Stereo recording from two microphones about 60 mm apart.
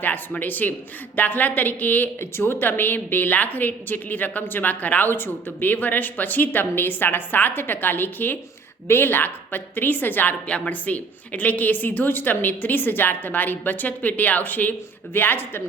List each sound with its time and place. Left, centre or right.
0.0 s a woman's voice: left